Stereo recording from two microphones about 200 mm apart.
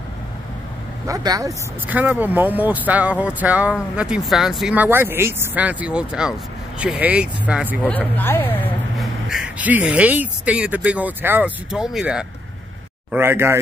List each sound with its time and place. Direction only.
1.0 s speech: 15° right (ahead or behind)
7.8 s speech: 10° left (ahead or behind); by 13.6 s 10° right (ahead or behind)